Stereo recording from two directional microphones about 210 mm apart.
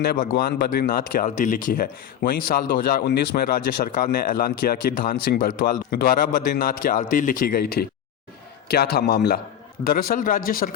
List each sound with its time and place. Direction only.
0.0 s a man's voice: 50° left (ahead or behind)